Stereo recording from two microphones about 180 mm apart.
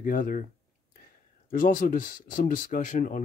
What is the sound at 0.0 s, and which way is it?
Speech, 50° left (ahead or behind).